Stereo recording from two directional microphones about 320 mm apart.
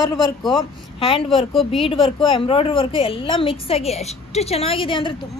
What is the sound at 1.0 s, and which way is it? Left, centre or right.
A woman's voice, centre.